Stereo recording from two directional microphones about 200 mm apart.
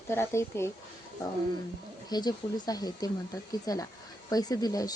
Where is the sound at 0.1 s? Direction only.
10° left (ahead or behind).